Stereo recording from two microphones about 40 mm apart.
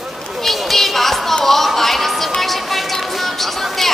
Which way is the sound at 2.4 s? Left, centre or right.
Centre.